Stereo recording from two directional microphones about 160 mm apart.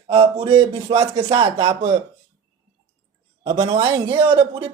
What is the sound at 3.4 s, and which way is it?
Speech, 35° right (ahead or behind).